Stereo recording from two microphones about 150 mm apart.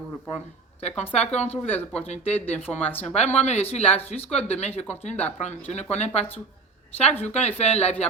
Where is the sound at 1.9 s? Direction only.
45° left (ahead or behind).